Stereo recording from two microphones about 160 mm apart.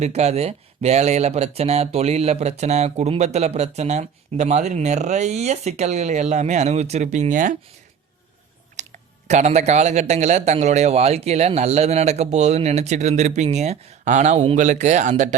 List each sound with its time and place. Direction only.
0.0 s speech: 45° right (ahead or behind)
8.7 s speech: 45° right (ahead or behind)